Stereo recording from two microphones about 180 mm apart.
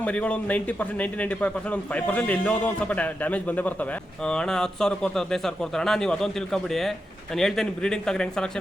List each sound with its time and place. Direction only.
0.0 s a man's voice: 5° left (ahead or behind)